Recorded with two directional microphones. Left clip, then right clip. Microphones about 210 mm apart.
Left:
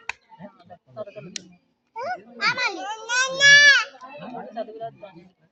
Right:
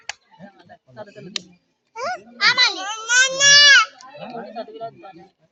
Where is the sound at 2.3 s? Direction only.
15° left (ahead or behind).